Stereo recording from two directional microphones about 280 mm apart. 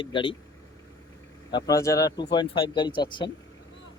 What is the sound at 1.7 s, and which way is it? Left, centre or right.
Speech, centre.